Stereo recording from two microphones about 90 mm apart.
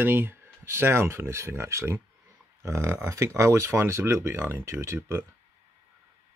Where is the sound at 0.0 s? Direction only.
25° right (ahead or behind).